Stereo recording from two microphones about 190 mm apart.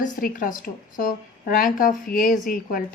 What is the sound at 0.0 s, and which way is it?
A woman's voice, 45° left (ahead or behind).